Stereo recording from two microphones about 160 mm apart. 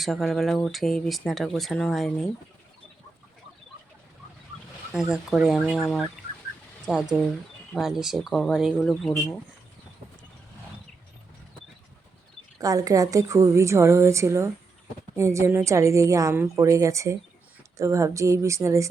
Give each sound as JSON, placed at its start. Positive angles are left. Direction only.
{"t": 0.0, "sound": "speech", "side_deg": 0}
{"t": 4.9, "sound": "speech", "side_deg": -5}
{"t": 12.5, "sound": "a woman's voice", "side_deg": -20}